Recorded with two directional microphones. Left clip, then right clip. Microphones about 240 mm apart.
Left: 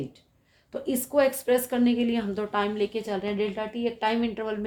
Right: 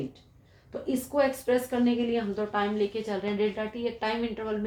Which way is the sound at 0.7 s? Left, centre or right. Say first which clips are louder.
Left 3 dB; left.